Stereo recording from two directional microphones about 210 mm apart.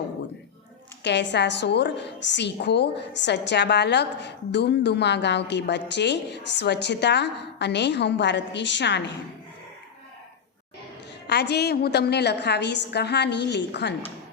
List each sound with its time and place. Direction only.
1.0 s a woman's voice: 55° left (ahead or behind)
11.3 s a woman's voice: 50° left (ahead or behind)